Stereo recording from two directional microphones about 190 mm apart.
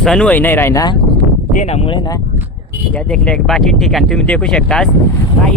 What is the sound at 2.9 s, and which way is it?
Speech, 5° left (ahead or behind).